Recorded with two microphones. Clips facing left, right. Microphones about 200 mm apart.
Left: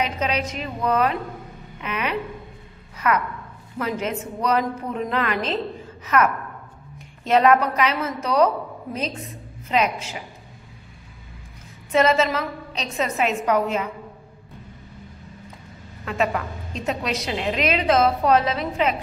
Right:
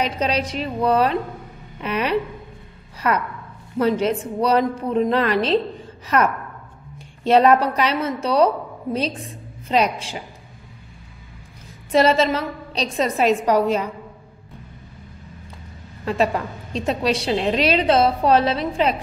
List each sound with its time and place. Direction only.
0.0 s a woman's voice: 35° right (ahead or behind)
11.9 s a woman's voice: 35° right (ahead or behind)
16.1 s a woman's voice: 30° right (ahead or behind)